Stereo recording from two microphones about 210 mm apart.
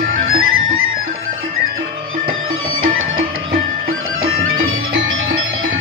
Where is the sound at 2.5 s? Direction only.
70° right (ahead or behind).